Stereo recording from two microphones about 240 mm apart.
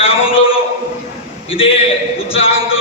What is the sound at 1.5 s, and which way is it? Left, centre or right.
Speech, left.